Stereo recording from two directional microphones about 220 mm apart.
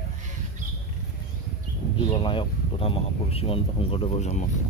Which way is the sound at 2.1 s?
20° left (ahead or behind).